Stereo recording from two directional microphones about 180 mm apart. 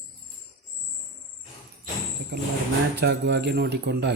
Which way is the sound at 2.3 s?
65° right (ahead or behind).